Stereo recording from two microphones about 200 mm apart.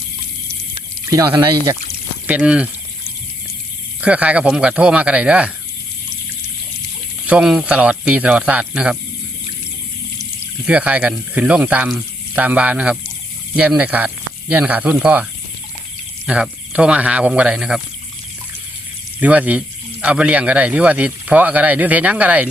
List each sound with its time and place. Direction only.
1.1 s speech: 20° right (ahead or behind)
2.2 s speech: 5° right (ahead or behind)
4.0 s speech: 5° right (ahead or behind)
7.3 s speech: 5° right (ahead or behind)
10.7 s speech: 5° right (ahead or behind)
19.2 s speech: 5° right (ahead or behind)